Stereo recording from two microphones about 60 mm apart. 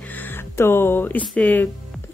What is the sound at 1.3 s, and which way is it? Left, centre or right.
Music, left.